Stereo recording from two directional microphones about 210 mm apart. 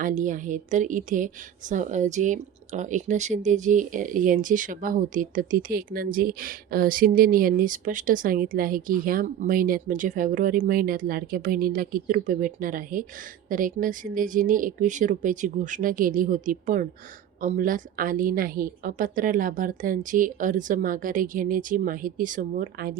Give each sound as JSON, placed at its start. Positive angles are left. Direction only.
{"t": 0.0, "sound": "speech", "side_deg": -40}